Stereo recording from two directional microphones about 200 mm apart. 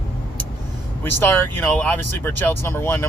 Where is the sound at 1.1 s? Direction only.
10° left (ahead or behind).